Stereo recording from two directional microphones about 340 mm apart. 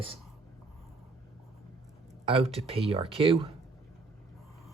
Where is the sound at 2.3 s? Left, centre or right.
Centre.